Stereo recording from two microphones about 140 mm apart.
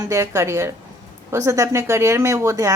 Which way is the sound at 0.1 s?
20° right (ahead or behind).